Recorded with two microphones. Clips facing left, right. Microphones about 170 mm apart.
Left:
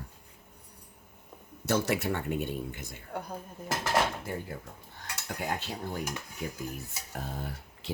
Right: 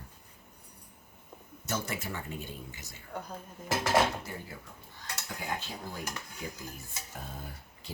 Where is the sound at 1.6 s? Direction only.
65° left (ahead or behind).